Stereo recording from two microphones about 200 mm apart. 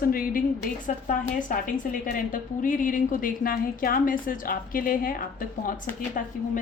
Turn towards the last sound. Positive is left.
turn(degrees=45)  # may be behind; listen again after turning